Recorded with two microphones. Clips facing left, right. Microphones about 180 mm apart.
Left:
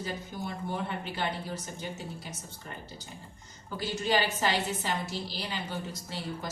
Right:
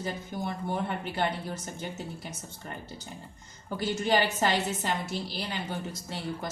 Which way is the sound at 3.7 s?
55° right (ahead or behind).